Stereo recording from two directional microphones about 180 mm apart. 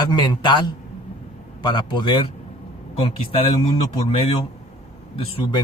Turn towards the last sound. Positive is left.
turn(degrees=30)  # may be behind; listen again after turning